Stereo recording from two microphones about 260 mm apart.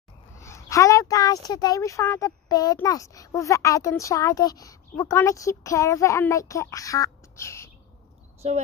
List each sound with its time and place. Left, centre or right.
0.4 s speech: centre
8.4 s speech: right